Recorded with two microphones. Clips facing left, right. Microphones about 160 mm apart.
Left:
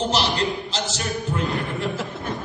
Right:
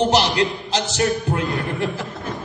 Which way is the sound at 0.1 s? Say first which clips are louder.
Right 5 dB; 70° right (ahead or behind).